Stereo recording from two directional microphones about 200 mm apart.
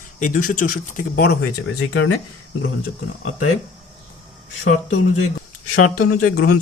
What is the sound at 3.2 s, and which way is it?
Speech, 90° left.